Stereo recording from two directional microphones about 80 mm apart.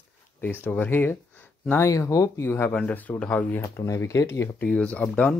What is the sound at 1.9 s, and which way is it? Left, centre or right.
Speech, left.